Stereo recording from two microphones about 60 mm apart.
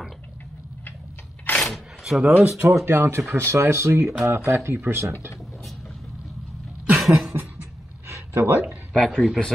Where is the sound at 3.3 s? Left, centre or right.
Right.